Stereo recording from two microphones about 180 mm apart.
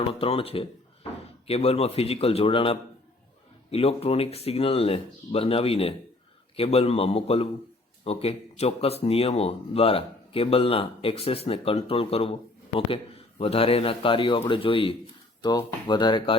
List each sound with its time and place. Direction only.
0.1 s speech: 30° left (ahead or behind)